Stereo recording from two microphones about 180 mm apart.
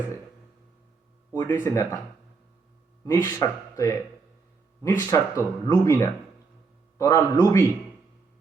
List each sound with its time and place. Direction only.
1.3 s speech: 15° left (ahead or behind)
3.0 s speech: 15° left (ahead or behind)